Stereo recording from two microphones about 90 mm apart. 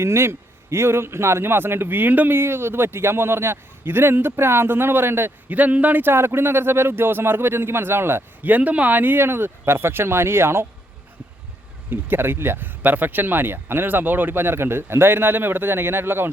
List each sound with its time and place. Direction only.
0.0 s a man's voice: 30° right (ahead or behind)
11.9 s a man's voice: 25° right (ahead or behind)